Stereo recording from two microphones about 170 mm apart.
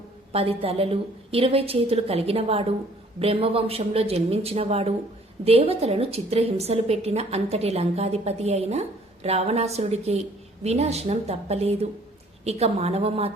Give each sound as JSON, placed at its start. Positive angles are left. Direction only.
{"t": 0.3, "sound": "a woman's voice", "side_deg": -35}